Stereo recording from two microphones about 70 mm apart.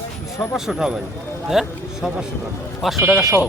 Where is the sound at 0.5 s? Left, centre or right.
Centre.